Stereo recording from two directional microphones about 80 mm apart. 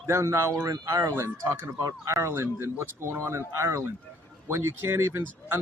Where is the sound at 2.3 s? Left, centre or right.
Right.